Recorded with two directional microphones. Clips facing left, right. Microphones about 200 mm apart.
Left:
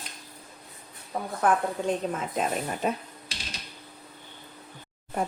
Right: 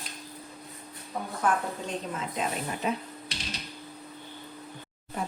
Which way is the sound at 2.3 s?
45° left (ahead or behind).